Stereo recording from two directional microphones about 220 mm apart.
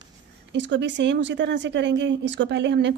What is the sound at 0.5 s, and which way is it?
A woman's voice, 55° right (ahead or behind).